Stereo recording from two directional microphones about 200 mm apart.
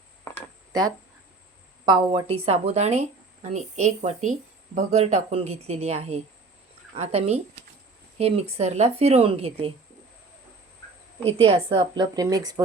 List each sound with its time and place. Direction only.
0.7 s speech: 20° right (ahead or behind)
11.3 s a woman's voice: 25° right (ahead or behind)